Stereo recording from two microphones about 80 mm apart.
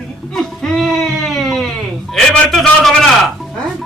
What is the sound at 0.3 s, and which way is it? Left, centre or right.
Baby cry, centre.